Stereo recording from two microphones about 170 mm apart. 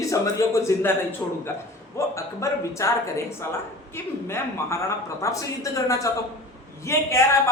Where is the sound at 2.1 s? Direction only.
15° left (ahead or behind).